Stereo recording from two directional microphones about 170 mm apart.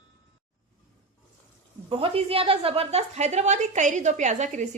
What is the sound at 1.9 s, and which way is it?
A woman's voice, 35° right (ahead or behind).